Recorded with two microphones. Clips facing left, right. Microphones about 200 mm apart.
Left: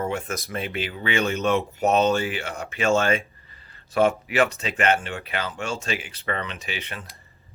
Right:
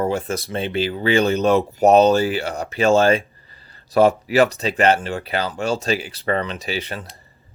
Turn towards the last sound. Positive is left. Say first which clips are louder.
# right 7 dB
turn(degrees=-35)  # may be behind; listen again after turning